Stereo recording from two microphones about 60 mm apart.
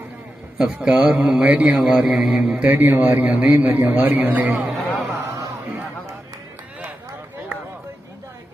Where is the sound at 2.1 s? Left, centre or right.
Centre.